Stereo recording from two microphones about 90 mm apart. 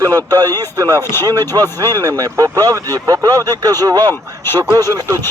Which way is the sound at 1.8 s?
40° right (ahead or behind).